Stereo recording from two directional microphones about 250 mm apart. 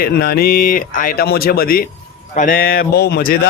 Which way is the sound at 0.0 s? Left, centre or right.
Left.